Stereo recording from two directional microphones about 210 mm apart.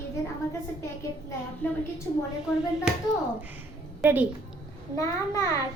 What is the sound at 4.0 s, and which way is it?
Speech, 10° right (ahead or behind).